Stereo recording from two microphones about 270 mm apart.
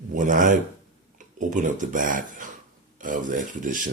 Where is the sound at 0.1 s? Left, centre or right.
Right.